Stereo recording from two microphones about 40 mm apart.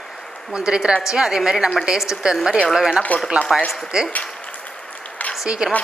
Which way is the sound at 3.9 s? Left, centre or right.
Centre.